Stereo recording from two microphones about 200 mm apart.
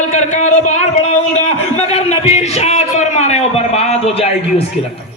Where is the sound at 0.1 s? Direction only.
35° left (ahead or behind).